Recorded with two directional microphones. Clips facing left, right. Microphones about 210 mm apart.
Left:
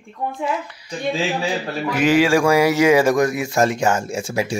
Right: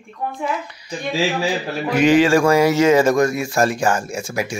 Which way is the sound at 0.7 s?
5° right (ahead or behind).